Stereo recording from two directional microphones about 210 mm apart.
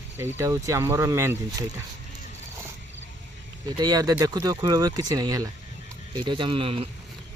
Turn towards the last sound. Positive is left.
turn(degrees=-25)  # may be behind; listen again after turning